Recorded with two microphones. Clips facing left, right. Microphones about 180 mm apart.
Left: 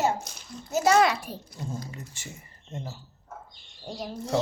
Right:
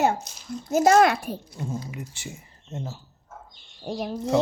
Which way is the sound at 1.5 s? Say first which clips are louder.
Right 4 dB; 10° right (ahead or behind).